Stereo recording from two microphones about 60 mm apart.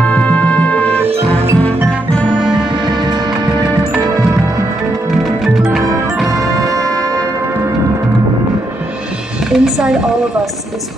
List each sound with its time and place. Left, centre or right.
0.0 s music: left
1.0 s music: right
5.1 s music: centre
6.2 s music: right
9.5 s a woman's voice: centre